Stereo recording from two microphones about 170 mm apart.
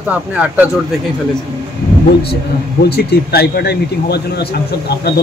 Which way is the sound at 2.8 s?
70° left (ahead or behind).